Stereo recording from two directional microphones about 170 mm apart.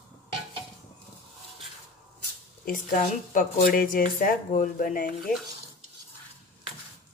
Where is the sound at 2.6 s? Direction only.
50° left (ahead or behind).